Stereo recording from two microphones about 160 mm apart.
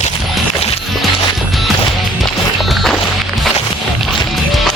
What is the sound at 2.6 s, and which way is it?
Music, centre (ahead or behind).